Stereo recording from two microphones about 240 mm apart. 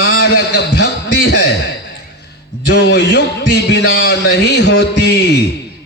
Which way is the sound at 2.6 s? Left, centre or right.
Left.